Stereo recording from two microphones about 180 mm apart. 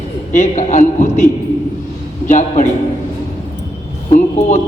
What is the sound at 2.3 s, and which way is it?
Speech, 45° left (ahead or behind).